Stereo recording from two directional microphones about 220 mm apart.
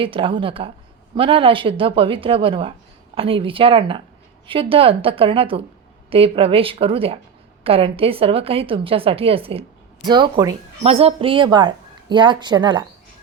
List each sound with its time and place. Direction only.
0.0 s a woman's voice: 25° right (ahead or behind)